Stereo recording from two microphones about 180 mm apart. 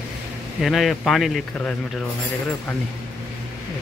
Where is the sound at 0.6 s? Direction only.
Centre (ahead or behind).